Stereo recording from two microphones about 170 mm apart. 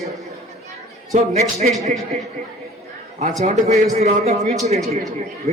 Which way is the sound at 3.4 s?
45° right (ahead or behind).